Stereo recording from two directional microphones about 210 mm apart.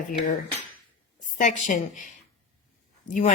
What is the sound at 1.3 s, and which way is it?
Speech, 35° left (ahead or behind).